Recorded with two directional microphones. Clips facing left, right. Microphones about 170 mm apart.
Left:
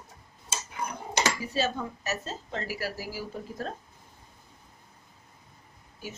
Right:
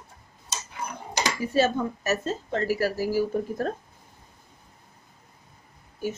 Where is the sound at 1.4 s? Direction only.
50° right (ahead or behind).